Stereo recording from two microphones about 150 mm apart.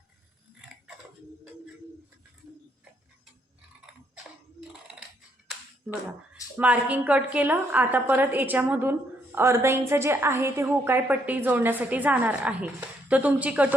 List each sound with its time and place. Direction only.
6.6 s a woman's voice: 10° right (ahead or behind)